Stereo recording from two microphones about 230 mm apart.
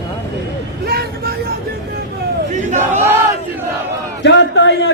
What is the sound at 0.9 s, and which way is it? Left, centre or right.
Vehicle, right.